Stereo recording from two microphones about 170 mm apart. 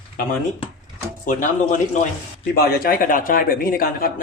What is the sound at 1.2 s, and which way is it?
Speech, 50° left (ahead or behind).